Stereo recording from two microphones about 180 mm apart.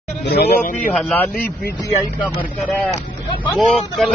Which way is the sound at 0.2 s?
60° left (ahead or behind).